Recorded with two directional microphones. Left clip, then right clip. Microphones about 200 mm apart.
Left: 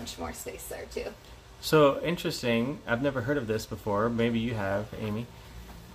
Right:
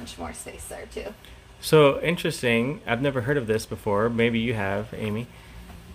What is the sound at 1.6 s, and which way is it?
Speech, 25° right (ahead or behind).